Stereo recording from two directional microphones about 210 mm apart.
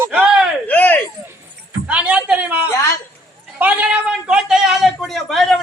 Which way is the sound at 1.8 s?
5° right (ahead or behind).